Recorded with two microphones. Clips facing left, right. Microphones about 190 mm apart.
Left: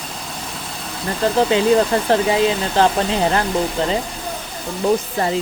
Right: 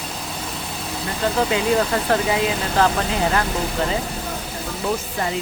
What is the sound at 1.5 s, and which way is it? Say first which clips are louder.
Speech: left 5 dB; 30° left (ahead or behind).